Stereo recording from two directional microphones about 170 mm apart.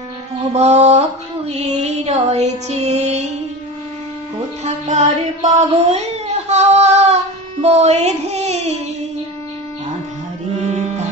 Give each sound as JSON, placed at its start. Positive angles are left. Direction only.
{"t": 0.5, "sound": "mantra", "side_deg": -40}
{"t": 1.5, "sound": "music", "side_deg": -40}
{"t": 4.8, "sound": "music", "side_deg": -45}
{"t": 6.5, "sound": "a sound", "side_deg": -40}
{"t": 7.6, "sound": "child singing", "side_deg": -40}